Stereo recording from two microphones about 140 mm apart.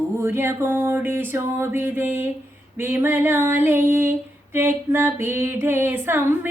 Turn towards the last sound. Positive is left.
turn(degrees=-15)  # may be behind; listen again after turning